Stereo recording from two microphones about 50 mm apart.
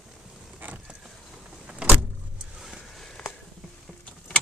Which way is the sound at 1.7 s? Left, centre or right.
Right.